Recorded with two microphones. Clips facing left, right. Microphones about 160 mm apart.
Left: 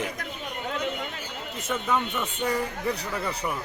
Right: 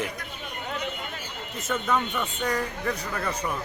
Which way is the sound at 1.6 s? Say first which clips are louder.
Right 1 dB; 5° left (ahead or behind).